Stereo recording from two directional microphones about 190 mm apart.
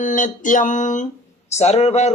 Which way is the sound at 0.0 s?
45° left (ahead or behind).